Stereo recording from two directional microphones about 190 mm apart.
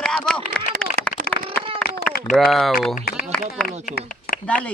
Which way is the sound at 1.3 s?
55° left (ahead or behind).